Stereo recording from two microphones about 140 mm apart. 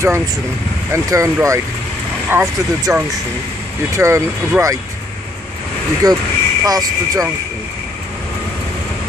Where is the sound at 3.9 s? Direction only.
20° right (ahead or behind).